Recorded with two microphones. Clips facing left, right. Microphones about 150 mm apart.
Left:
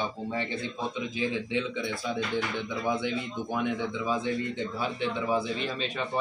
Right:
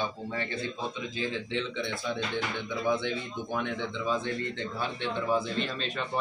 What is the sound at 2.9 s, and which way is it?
A man's voice, 10° left (ahead or behind).